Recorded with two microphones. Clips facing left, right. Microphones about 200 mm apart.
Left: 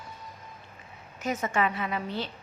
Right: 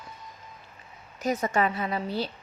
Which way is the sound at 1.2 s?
35° right (ahead or behind).